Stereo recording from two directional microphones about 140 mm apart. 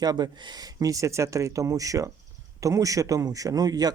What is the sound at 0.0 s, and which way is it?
Speech, 30° right (ahead or behind).